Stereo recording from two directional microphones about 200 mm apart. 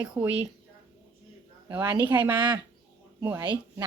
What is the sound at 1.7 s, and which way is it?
A woman's voice, 10° right (ahead or behind).